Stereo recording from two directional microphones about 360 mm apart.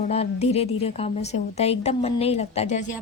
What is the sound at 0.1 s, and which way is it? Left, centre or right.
A woman's voice, centre.